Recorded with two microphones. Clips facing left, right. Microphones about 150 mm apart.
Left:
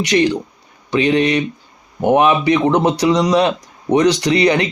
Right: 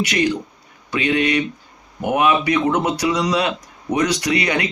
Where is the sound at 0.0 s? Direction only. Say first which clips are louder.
Left 4 dB; 25° left (ahead or behind).